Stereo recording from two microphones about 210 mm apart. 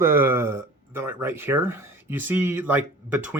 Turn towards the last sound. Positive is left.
turn(degrees=-10)  # may be behind; listen again after turning